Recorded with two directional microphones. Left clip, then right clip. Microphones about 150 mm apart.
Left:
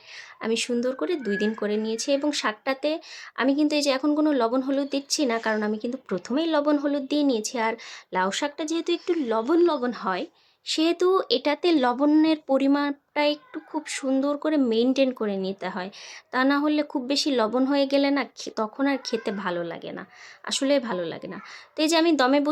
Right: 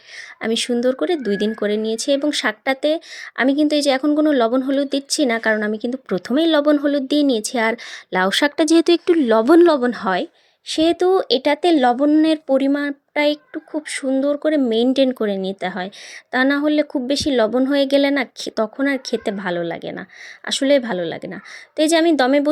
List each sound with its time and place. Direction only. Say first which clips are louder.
0.4 s speech: right 7 dB; 35° right (ahead or behind)
10.7 s a woman's voice: right 6 dB; 30° right (ahead or behind)